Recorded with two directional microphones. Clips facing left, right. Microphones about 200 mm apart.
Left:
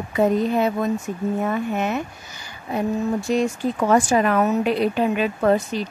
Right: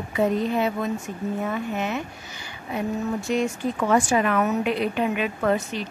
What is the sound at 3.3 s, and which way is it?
A woman's voice, 35° left (ahead or behind).